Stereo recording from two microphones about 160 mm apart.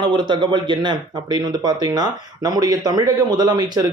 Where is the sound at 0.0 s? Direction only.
30° right (ahead or behind).